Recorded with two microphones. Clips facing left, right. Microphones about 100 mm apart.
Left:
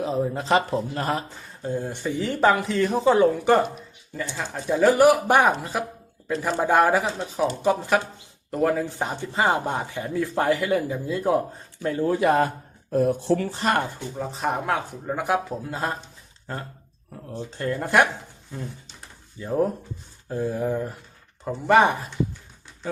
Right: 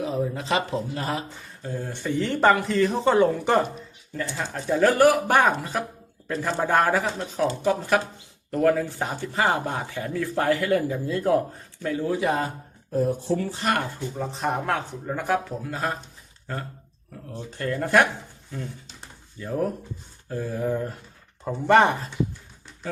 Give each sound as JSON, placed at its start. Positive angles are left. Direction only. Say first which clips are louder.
{"t": 0.0, "sound": "speech", "louder": "left 2 dB", "side_deg": 35}
{"t": 1.6, "sound": "speech", "louder": "left 2 dB", "side_deg": 20}
{"t": 11.9, "sound": "speech", "louder": "left 3 dB", "side_deg": 50}
{"t": 13.6, "sound": "speech", "louder": "left 2 dB", "side_deg": 30}
{"t": 14.2, "sound": "speech", "louder": "left 1 dB", "side_deg": 0}
{"t": 15.7, "sound": "speech", "louder": "even", "side_deg": 30}
{"t": 17.3, "sound": "speech", "louder": "left 1 dB", "side_deg": 25}
{"t": 19.4, "sound": "speech", "louder": "left 3 dB", "side_deg": 25}
{"t": 20.7, "sound": "speech", "louder": "even", "side_deg": 10}